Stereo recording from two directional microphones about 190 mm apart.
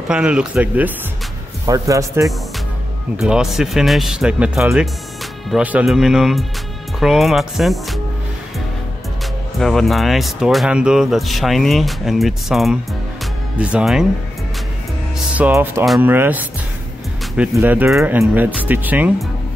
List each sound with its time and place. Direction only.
0.1 s speech: 5° right (ahead or behind)
3.2 s speech: 5° right (ahead or behind)
9.6 s speech: centre (ahead or behind)
13.2 s music: 5° right (ahead or behind)
15.1 s music: 10° right (ahead or behind)
15.8 s speech: 5° right (ahead or behind)